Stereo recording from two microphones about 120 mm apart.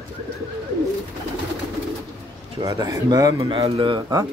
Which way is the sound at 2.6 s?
30° right (ahead or behind).